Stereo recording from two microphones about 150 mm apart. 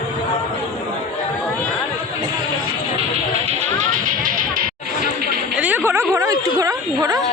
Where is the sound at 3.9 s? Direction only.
65° right (ahead or behind).